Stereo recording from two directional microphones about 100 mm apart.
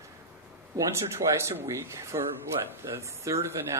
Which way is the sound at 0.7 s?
30° right (ahead or behind).